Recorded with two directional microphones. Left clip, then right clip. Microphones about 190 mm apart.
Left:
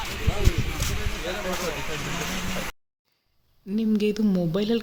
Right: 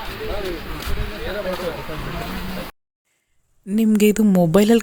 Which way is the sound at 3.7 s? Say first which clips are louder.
Right 8 dB; 25° right (ahead or behind).